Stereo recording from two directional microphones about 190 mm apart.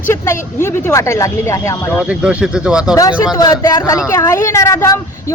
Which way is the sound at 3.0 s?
20° left (ahead or behind).